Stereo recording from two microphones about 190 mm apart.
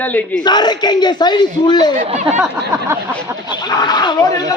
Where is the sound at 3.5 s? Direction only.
20° left (ahead or behind).